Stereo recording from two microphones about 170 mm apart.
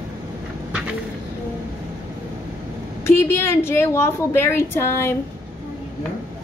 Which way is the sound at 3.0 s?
15° left (ahead or behind).